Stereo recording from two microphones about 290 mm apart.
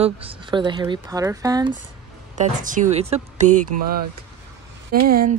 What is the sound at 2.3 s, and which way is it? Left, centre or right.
Speech, right.